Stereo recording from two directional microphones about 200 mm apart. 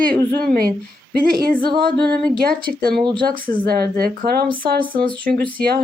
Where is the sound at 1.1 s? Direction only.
50° right (ahead or behind).